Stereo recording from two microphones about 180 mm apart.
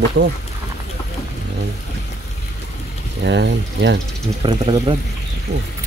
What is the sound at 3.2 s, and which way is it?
Speech, 80° right.